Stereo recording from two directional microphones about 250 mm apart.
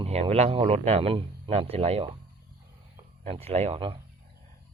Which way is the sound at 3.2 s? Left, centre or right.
Right.